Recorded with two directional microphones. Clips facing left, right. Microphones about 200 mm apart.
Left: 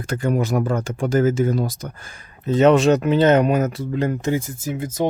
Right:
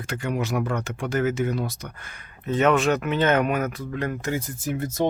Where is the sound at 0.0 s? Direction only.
45° left (ahead or behind); by 4.4 s 25° left (ahead or behind).